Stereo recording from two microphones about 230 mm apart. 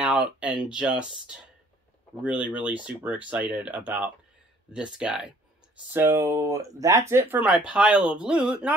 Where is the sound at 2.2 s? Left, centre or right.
Centre.